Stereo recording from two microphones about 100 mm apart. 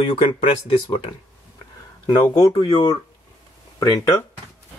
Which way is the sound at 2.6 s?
45° left (ahead or behind).